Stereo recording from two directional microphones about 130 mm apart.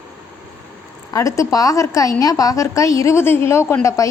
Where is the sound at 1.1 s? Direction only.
25° left (ahead or behind).